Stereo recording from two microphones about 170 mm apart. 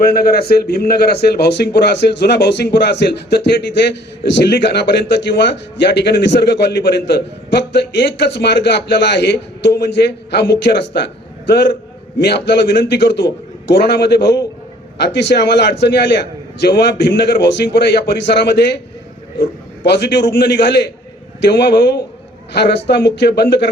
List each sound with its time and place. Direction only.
0.0 s speech: 65° left (ahead or behind)
19.8 s speech: 80° left